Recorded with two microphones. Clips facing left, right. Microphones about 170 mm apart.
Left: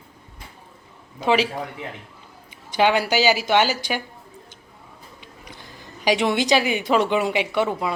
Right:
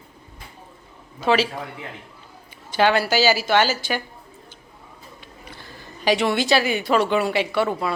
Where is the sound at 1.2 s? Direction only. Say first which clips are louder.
Even; 15° left (ahead or behind).